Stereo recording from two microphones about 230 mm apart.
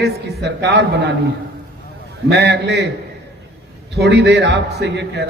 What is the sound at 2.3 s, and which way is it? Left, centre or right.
Speech, right.